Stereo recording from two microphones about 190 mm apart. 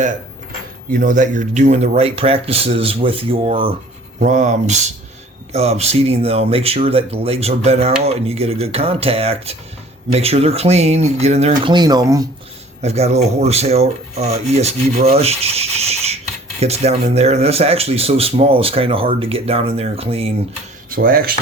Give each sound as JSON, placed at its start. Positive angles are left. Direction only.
{"t": 0.9, "sound": "speech", "side_deg": -45}
{"t": 4.2, "sound": "speech", "side_deg": -40}
{"t": 12.8, "sound": "speech", "side_deg": -35}
{"t": 20.9, "sound": "speech", "side_deg": -50}